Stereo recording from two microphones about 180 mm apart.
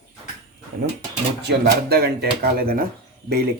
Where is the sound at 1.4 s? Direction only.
65° right (ahead or behind).